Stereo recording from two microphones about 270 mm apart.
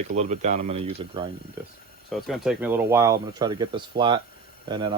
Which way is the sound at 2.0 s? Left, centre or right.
Centre.